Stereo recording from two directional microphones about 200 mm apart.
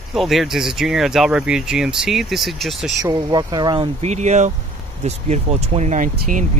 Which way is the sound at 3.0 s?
20° right (ahead or behind).